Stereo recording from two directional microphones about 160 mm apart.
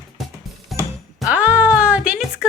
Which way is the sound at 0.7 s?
Centre (ahead or behind).